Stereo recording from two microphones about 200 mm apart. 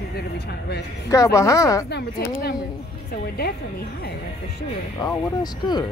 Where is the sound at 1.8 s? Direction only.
55° left (ahead or behind).